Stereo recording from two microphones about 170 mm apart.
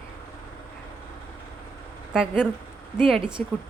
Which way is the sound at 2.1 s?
5° right (ahead or behind).